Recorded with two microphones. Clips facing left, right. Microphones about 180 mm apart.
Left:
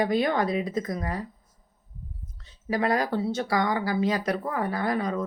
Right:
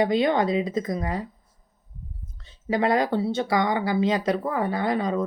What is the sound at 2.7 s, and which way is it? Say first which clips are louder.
Speech: right 3 dB; 25° right (ahead or behind).